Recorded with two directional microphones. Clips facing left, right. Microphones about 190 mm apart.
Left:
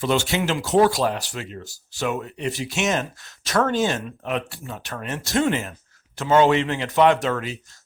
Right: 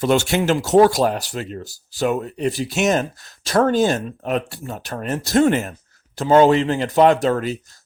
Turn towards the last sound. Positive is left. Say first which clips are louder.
# right 4 dB
turn(degrees=-40)  # may be behind; listen again after turning